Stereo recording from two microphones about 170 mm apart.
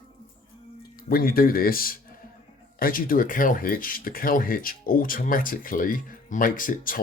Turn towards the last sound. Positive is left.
turn(degrees=50)  # may be behind; listen again after turning